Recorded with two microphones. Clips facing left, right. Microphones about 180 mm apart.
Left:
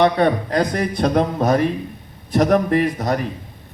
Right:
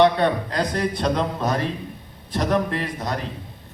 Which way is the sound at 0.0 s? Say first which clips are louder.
Left 2 dB; 50° left (ahead or behind).